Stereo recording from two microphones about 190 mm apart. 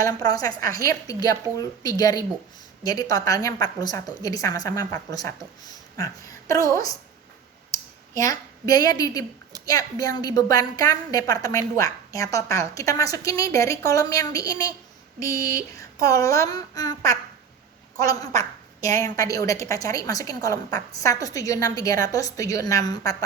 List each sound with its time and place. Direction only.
0.0 s a woman's voice: 20° left (ahead or behind)
7.7 s a sound: 15° left (ahead or behind)
9.6 s a woman's voice: 20° left (ahead or behind)